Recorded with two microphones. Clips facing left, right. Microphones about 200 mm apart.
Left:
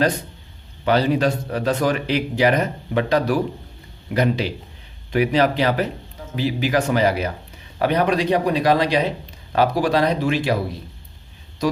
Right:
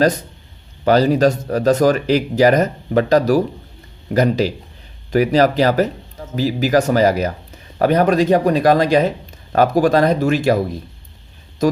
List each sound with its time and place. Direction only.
0.9 s speech: 40° right (ahead or behind)
11.6 s speech: 45° right (ahead or behind)